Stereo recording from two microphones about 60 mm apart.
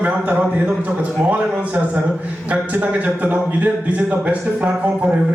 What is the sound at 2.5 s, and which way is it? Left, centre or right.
A man's voice, right.